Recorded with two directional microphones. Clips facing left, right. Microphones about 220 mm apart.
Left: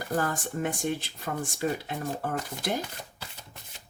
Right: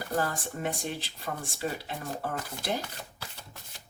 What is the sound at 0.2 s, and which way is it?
Speech, 50° left (ahead or behind).